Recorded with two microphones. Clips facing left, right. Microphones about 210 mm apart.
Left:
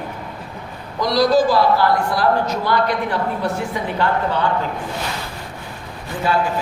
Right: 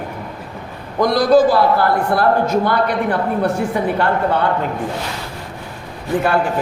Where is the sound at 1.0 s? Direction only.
50° right (ahead or behind).